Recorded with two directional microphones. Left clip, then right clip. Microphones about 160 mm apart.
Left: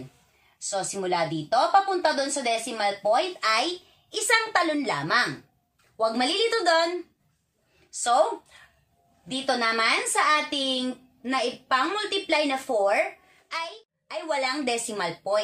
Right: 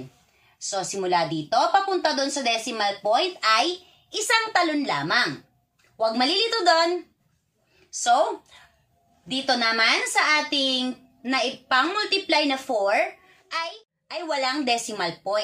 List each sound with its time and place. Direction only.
0.6 s a woman's voice: 20° left (ahead or behind)
9.3 s a woman's voice: 20° left (ahead or behind)